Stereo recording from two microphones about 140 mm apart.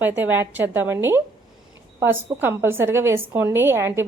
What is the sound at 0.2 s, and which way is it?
A woman's voice, 15° right (ahead or behind).